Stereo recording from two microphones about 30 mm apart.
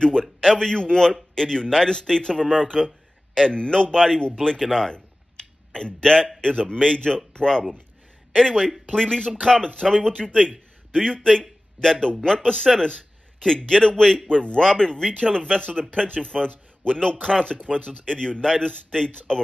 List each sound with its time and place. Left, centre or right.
0.0 s a man's voice: left
6.0 s a man's voice: left
9.3 s a man's voice: centre; by 19.4 s left